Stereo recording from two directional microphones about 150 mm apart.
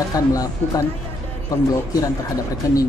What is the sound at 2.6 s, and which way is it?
Speech, 20° left (ahead or behind).